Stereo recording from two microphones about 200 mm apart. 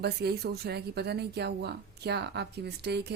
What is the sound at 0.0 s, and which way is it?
Speech, 55° right (ahead or behind).